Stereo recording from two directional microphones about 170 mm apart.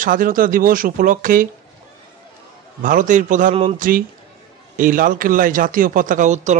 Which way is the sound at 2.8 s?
50° right (ahead or behind).